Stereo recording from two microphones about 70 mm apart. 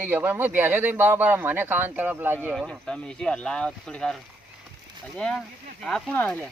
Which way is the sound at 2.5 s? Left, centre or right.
Centre.